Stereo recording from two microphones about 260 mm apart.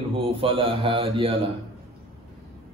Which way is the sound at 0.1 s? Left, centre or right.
Right.